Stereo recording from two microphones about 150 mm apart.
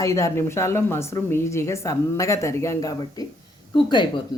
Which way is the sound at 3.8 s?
30° left (ahead or behind).